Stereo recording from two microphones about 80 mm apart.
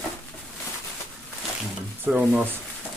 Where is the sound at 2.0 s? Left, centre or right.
Right.